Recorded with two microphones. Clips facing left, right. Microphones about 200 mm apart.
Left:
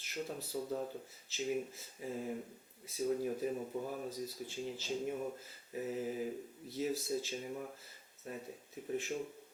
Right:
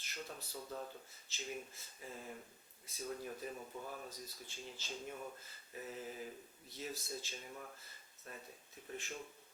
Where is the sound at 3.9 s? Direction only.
15° left (ahead or behind).